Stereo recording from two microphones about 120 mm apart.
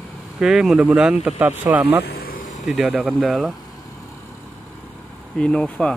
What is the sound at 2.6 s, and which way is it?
Speech, 5° right (ahead or behind).